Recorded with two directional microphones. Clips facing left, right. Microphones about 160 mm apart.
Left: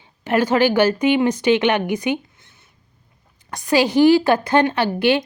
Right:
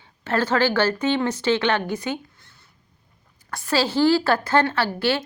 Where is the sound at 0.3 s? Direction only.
15° left (ahead or behind).